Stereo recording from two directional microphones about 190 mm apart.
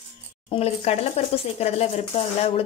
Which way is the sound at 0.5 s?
35° left (ahead or behind).